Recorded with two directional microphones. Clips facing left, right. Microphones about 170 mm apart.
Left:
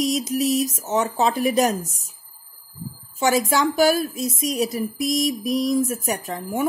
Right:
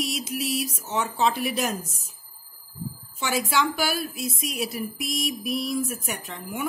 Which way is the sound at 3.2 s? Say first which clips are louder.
Left 6 dB; 40° left (ahead or behind).